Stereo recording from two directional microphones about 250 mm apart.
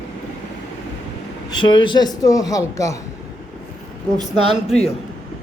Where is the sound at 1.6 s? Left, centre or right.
Centre.